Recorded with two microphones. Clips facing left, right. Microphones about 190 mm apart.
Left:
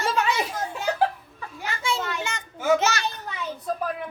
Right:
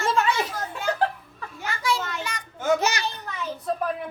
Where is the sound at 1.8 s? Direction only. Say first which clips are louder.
Right 1 dB; 25° left (ahead or behind).